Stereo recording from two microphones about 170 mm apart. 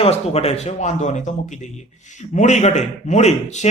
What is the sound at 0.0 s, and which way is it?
A man's voice, 35° left (ahead or behind).